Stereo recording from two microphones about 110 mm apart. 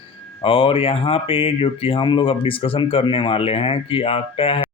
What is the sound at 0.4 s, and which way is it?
Speech, 55° left (ahead or behind).